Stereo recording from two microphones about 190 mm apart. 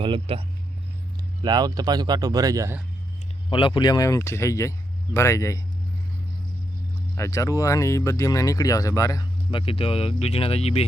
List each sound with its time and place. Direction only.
0.0 s speech: 30° right (ahead or behind)
3.5 s speech: 25° left (ahead or behind)
7.2 s speech: 15° left (ahead or behind); by 10.8 s 30° left (ahead or behind)